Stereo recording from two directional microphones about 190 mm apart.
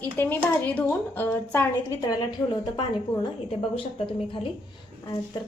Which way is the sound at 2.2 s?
20° left (ahead or behind).